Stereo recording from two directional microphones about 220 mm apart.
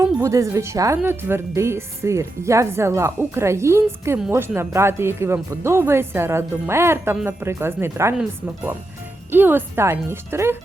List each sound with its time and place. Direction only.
0.0 s a woman's voice: 15° right (ahead or behind)